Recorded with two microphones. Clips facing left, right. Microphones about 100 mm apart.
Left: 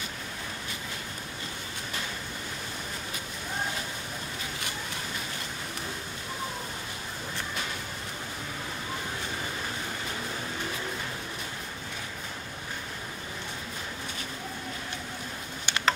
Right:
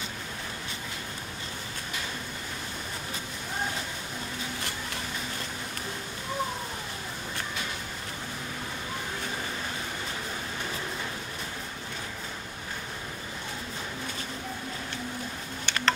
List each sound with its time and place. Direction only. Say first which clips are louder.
15.6 s tick: even; 5° left (ahead or behind)